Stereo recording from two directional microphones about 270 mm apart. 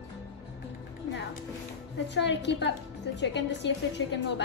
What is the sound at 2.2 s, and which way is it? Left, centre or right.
A woman's voice, left.